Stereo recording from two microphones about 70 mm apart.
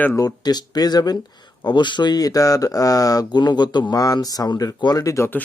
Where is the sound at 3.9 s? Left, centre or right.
Left.